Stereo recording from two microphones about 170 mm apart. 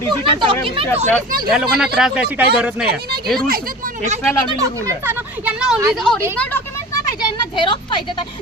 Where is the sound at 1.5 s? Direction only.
Centre (ahead or behind).